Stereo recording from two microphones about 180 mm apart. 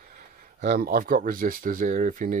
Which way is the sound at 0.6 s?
55° right (ahead or behind).